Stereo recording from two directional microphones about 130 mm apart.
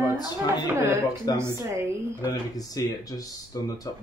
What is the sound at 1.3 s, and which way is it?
Speech, 30° left (ahead or behind).